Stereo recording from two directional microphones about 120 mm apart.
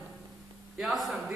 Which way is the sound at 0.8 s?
Centre (ahead or behind).